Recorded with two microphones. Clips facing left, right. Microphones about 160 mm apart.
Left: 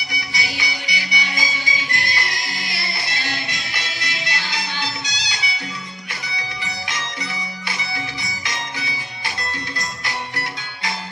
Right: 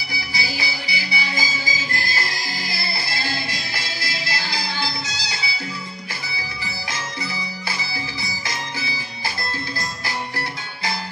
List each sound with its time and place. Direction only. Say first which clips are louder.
0.1 s music: even; 30° right (ahead or behind)
6.6 s music: even; 30° right (ahead or behind)
8.2 s music: even; 30° right (ahead or behind)